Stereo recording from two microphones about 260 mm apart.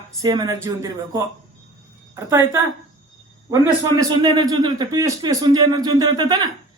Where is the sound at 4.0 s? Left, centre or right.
Centre.